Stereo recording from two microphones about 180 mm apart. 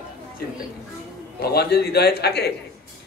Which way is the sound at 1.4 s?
60° left (ahead or behind).